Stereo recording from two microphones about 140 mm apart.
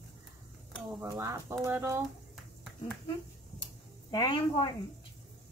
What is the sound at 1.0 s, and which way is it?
Speech, 25° right (ahead or behind).